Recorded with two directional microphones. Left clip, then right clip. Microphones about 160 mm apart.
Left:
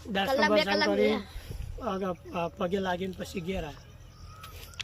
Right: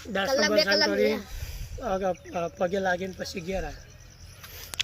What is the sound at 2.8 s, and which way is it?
Speech, 30° left (ahead or behind).